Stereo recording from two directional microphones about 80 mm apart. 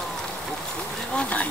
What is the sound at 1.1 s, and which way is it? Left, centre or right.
Bee, centre.